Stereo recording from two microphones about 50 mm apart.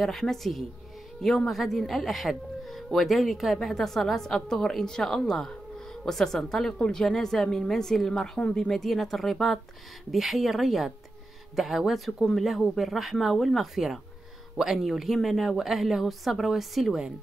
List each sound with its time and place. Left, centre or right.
0.0 s a woman's voice: centre
8.4 s speech: left
8.6 s a woman's voice: centre